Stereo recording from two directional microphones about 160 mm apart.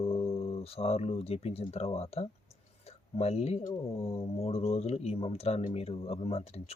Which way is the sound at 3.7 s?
35° left (ahead or behind).